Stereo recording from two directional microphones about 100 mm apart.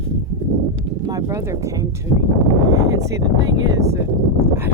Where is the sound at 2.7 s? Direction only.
40° right (ahead or behind).